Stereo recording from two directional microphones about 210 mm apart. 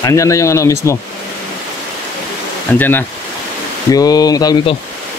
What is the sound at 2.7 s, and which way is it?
Speech, 10° left (ahead or behind).